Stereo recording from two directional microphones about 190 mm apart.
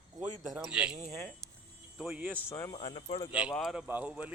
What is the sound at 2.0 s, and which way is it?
Speech, 5° right (ahead or behind).